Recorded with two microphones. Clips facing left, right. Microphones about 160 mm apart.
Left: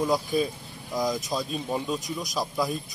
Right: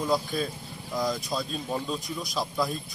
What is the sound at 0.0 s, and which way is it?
Speech, 15° left (ahead or behind).